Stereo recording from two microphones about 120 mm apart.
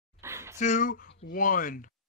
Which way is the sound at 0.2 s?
20° right (ahead or behind).